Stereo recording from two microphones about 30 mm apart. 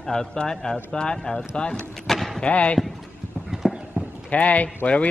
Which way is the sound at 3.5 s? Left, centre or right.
Centre.